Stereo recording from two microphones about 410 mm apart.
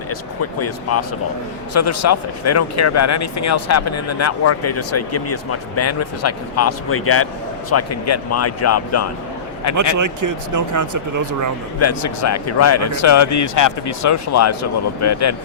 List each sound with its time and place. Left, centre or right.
0.6 s speech: left
10.0 s speech: right
11.8 s speech: left